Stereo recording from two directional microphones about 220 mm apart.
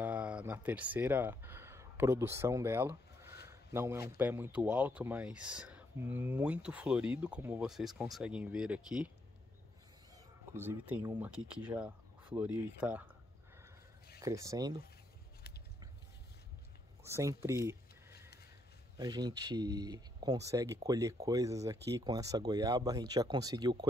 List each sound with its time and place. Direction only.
0.0 s a sound: 5° right (ahead or behind)
4.2 s speech: 10° right (ahead or behind)
10.1 s speech: 10° right (ahead or behind)
14.2 s speech: 15° right (ahead or behind)
17.0 s speech: 15° right (ahead or behind)
18.9 s speech: 20° right (ahead or behind)